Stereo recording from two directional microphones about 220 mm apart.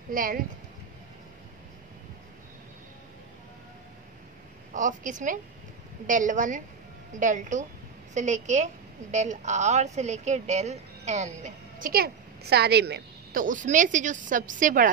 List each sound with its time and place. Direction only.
0.1 s a woman's voice: 40° right (ahead or behind)
4.7 s a woman's voice: 35° right (ahead or behind)